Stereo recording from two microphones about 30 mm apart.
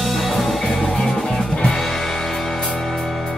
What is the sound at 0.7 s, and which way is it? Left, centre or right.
Music, centre.